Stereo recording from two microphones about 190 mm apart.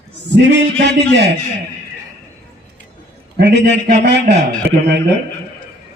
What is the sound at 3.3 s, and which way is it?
A man's voice, 65° right (ahead or behind).